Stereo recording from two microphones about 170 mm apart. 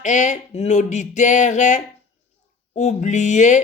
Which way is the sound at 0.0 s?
45° left (ahead or behind).